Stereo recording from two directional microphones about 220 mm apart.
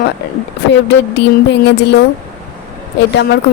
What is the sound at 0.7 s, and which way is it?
Speech, 50° left (ahead or behind).